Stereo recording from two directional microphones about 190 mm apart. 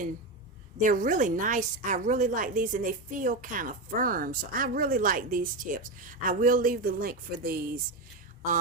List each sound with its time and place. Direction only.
0.8 s a woman's voice: 45° right (ahead or behind)